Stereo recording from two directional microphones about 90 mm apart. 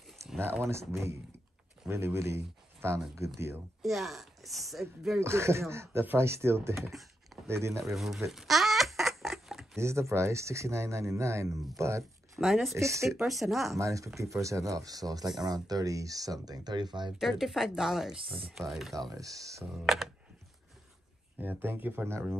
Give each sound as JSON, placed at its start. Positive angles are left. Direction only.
{"t": 0.4, "sound": "speech", "side_deg": -25}
{"t": 3.8, "sound": "a woman's voice", "side_deg": 0}
{"t": 5.2, "sound": "speech", "side_deg": -30}
{"t": 7.9, "sound": "a woman's voice", "side_deg": 0}
{"t": 8.3, "sound": "rodents", "side_deg": 0}
{"t": 9.8, "sound": "speech", "side_deg": -30}
{"t": 12.4, "sound": "a woman's voice", "side_deg": 0}
{"t": 12.7, "sound": "speech", "side_deg": -35}
{"t": 13.2, "sound": "a woman's voice", "side_deg": 0}
{"t": 13.7, "sound": "speech", "side_deg": -35}
{"t": 17.2, "sound": "a woman's voice", "side_deg": 0}
{"t": 18.9, "sound": "speech", "side_deg": -40}
{"t": 19.9, "sound": "a woman's voice", "side_deg": 0}
{"t": 21.4, "sound": "speech", "side_deg": -20}